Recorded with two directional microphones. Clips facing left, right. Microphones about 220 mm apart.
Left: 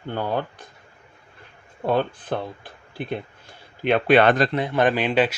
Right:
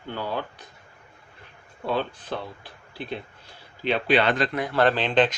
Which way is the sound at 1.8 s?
50° left (ahead or behind).